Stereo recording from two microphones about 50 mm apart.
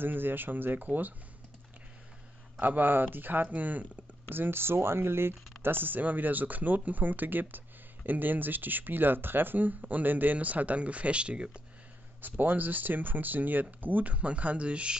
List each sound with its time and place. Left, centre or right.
0.0 s speech: right
2.6 s speech: right
12.2 s speech: right